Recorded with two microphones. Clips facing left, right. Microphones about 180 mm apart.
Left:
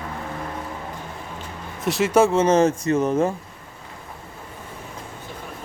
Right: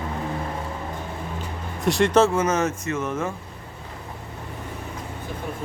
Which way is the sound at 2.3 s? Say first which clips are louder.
Left 5 dB; 30° left (ahead or behind).